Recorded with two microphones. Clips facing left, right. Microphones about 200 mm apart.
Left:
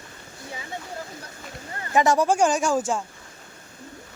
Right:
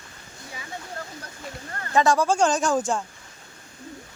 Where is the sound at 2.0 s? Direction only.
20° left (ahead or behind).